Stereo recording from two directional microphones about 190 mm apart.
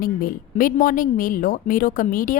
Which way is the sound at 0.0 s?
50° left (ahead or behind).